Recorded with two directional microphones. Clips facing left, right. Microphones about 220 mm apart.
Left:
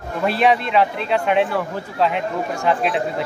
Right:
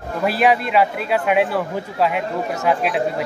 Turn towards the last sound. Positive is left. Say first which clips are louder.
# right 1 dB
turn(degrees=-5)  # may be behind; listen again after turning